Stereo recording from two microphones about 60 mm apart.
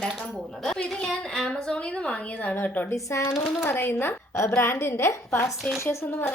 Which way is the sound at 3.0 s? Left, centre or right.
Left.